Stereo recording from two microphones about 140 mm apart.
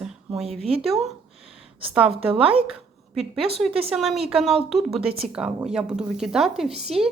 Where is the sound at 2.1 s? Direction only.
40° right (ahead or behind).